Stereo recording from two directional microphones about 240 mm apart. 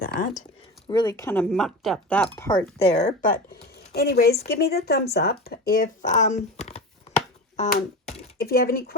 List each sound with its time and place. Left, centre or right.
0.0 s speech: left
0.9 s speech: centre
2.8 s speech: left